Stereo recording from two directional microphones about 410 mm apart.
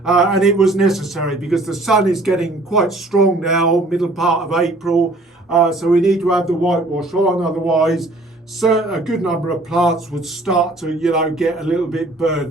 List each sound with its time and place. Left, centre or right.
0.0 s a man's voice: centre